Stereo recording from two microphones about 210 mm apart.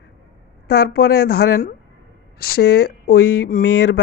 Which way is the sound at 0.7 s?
50° left (ahead or behind).